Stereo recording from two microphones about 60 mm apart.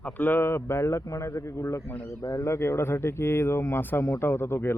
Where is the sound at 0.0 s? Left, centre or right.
Left.